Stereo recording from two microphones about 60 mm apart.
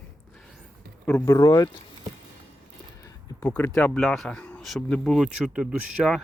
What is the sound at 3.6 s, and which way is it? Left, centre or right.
Speech, left.